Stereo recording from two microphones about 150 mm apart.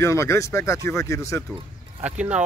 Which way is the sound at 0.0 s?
20° left (ahead or behind).